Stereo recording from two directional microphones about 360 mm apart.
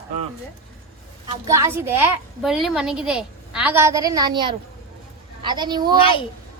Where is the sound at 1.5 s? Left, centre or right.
Centre.